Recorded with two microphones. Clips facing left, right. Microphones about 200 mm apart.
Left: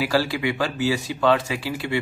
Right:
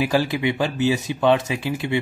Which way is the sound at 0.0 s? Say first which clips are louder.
Right 2 dB; 20° right (ahead or behind).